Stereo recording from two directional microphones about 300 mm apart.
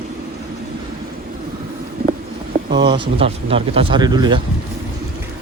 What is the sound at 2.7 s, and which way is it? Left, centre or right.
Speech, centre.